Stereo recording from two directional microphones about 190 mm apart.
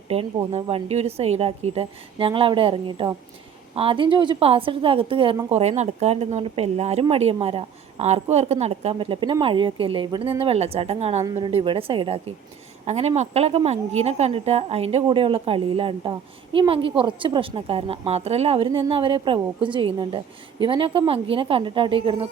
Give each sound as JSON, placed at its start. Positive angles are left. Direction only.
{"t": 0.1, "sound": "a woman's voice", "side_deg": -30}